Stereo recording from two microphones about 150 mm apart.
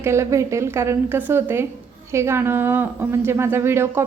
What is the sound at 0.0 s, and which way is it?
A woman's voice, 20° right (ahead or behind).